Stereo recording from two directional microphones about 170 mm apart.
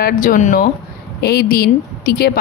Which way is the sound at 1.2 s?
65° left (ahead or behind).